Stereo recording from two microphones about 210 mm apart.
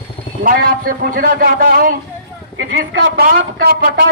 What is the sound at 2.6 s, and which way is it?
A man's voice, 55° right (ahead or behind).